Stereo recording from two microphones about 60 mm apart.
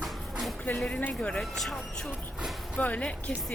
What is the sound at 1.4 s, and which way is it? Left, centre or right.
Speech, centre.